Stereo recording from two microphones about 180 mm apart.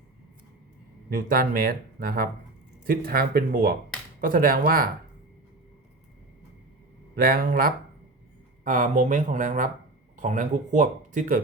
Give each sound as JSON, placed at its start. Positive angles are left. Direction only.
{"t": 1.1, "sound": "speech", "side_deg": -55}
{"t": 7.2, "sound": "speech", "side_deg": -55}